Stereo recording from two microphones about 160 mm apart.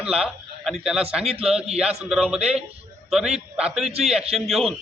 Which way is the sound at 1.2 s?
40° right (ahead or behind).